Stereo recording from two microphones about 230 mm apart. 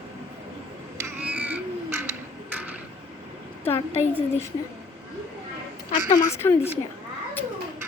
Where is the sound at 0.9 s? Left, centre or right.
Centre.